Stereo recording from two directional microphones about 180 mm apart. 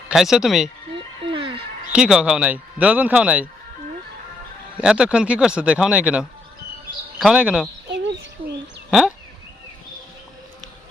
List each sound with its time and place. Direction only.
0.1 s speech: centre (ahead or behind)
1.3 s a sound: 30° right (ahead or behind)
1.9 s speech: 5° right (ahead or behind)
4.8 s speech: 5° right (ahead or behind)
8.9 s speech: 5° right (ahead or behind)